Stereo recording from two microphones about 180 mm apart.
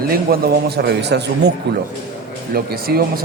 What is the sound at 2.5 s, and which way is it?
Speech, 55° right (ahead or behind).